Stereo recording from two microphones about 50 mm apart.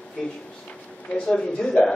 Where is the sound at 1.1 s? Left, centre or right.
Centre.